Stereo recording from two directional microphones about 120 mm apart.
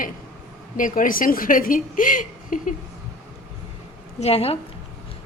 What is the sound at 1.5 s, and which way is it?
A woman's voice, 90° left.